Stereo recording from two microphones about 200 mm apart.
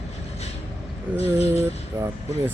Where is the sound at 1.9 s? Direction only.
15° right (ahead or behind).